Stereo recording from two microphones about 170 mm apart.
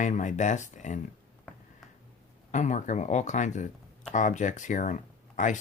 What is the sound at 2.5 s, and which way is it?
Speech, 45° left (ahead or behind).